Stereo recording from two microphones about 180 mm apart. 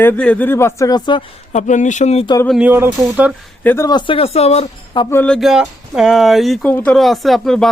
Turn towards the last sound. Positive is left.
turn(degrees=0)  # may be behind; listen again after turning